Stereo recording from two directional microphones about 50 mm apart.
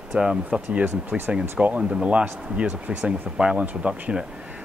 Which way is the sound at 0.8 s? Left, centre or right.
Right.